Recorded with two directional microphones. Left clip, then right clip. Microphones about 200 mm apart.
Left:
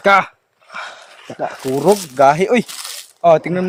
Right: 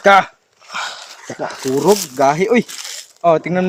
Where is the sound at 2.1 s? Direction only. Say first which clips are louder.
Left 2 dB; 35° left (ahead or behind).